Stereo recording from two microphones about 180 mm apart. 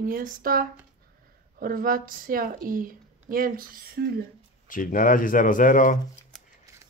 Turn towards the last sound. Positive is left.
turn(degrees=45)  # may be behind; listen again after turning